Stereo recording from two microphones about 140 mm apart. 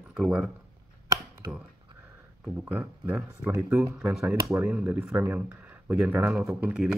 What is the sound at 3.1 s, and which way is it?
Speech, 20° right (ahead or behind).